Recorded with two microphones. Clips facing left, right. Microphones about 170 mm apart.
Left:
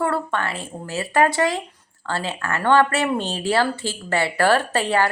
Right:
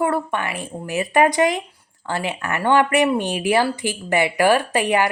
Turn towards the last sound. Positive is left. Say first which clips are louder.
# right 1 dB
turn(degrees=-15)  # may be behind; listen again after turning